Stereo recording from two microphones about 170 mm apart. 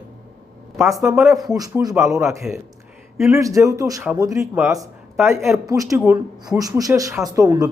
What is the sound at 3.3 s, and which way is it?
Speech, 20° right (ahead or behind).